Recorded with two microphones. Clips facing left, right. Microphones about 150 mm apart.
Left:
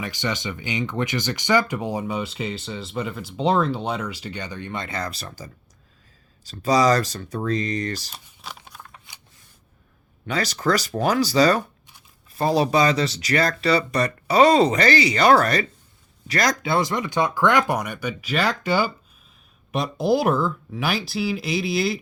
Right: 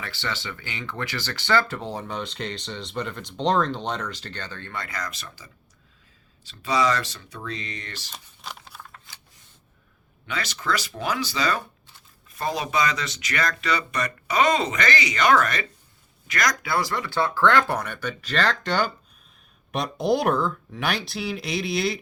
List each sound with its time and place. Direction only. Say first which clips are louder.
0.0 s speech: left 5 dB; 15° left (ahead or behind); by 8.1 s 40° left (ahead or behind)
8.1 s a sound: even; centre (ahead or behind)
8.9 s shuffling cards: even; 15° left (ahead or behind)
10.2 s speech: left 6 dB; 40° left (ahead or behind); by 21.9 s centre (ahead or behind)